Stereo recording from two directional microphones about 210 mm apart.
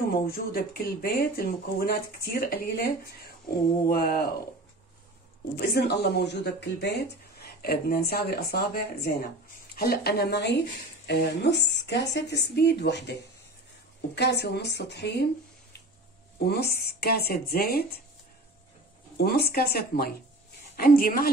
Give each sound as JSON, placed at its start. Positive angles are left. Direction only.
{"t": 0.1, "sound": "speech", "side_deg": 45}
{"t": 5.6, "sound": "speech", "side_deg": 50}
{"t": 16.4, "sound": "speech", "side_deg": 50}
{"t": 19.1, "sound": "speech", "side_deg": 50}